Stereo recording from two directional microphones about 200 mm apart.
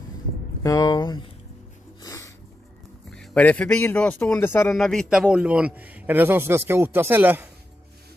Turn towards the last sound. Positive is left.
turn(degrees=-10)  # may be behind; listen again after turning